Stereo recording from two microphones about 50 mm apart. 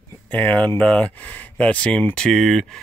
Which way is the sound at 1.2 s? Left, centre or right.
Left.